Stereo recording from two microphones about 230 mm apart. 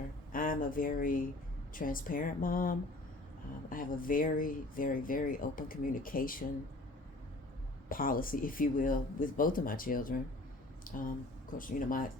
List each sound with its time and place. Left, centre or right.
0.3 s speech: left
7.9 s speech: left